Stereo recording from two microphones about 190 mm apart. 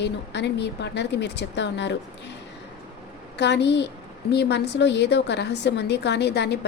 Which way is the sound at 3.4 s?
65° left (ahead or behind).